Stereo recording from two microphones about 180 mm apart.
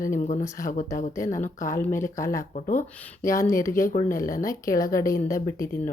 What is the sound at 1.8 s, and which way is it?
Speech, 15° left (ahead or behind).